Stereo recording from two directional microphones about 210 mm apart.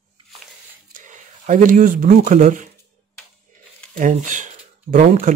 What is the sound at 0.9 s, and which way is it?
Speech, 35° right (ahead or behind).